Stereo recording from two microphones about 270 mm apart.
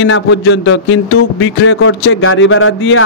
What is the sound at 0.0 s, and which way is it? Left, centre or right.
A man's voice, left.